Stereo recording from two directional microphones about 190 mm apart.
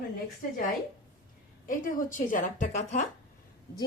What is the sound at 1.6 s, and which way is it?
A woman's voice, 45° left (ahead or behind).